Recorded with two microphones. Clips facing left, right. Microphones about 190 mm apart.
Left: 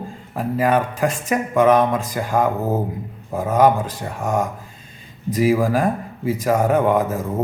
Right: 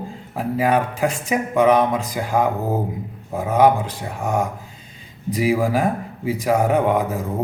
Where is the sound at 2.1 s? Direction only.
10° right (ahead or behind).